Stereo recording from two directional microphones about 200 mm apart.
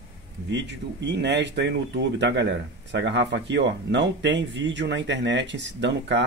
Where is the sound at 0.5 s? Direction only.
60° right (ahead or behind).